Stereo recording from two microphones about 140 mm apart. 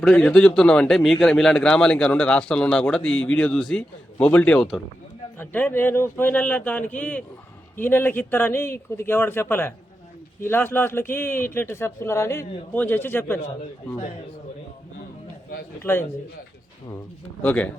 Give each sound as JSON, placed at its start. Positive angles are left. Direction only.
{"t": 0.0, "sound": "a man's voice", "side_deg": 5}
{"t": 15.8, "sound": "a man's voice", "side_deg": 15}
{"t": 17.4, "sound": "a man's voice", "side_deg": 10}